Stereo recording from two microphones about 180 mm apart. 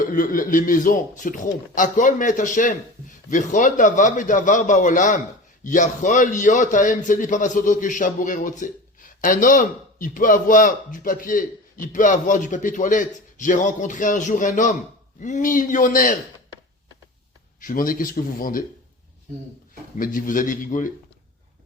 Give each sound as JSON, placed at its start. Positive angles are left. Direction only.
{"t": 0.0, "sound": "a man's voice", "side_deg": 50}
{"t": 17.6, "sound": "a man's voice", "side_deg": 50}
{"t": 20.0, "sound": "a man's voice", "side_deg": 50}